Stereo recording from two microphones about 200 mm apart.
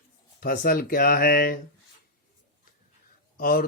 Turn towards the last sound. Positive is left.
turn(degrees=45)  # may be behind; listen again after turning